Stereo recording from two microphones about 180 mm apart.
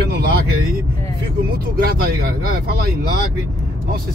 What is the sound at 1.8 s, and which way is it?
Speech, 60° right (ahead or behind).